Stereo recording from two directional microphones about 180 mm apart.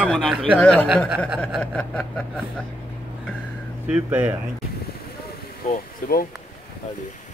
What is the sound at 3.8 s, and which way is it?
Speech, 5° right (ahead or behind).